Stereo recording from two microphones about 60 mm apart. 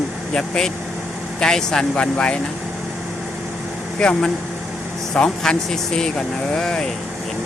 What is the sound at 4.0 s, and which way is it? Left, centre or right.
Speech, centre.